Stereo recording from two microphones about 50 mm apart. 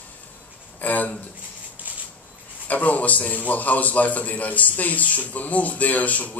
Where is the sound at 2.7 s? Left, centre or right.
Left.